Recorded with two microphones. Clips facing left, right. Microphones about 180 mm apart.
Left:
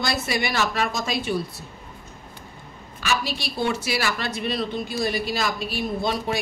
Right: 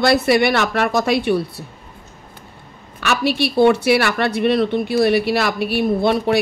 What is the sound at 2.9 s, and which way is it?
Speech, 65° right (ahead or behind).